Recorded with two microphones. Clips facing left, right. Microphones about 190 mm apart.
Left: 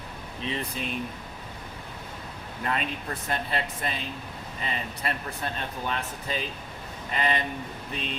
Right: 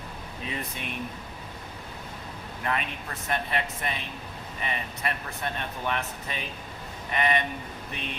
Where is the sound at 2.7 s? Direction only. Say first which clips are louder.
Left 1 dB; 30° left (ahead or behind).